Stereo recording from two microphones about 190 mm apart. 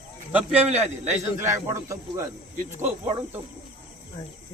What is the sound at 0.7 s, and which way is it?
Speech, 35° right (ahead or behind).